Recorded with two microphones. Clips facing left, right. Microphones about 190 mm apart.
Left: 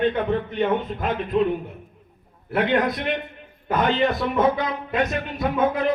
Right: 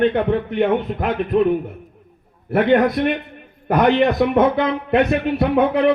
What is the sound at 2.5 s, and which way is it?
Speech, 50° right (ahead or behind).